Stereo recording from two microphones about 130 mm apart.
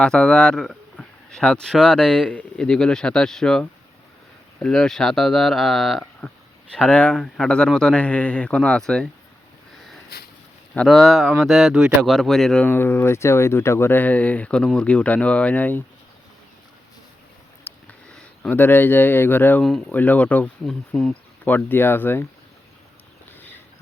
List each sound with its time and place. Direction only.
0.0 s speech: 5° left (ahead or behind)
10.8 s speech: centre (ahead or behind)
17.6 s a sound: 15° left (ahead or behind)
18.1 s speech: 10° left (ahead or behind)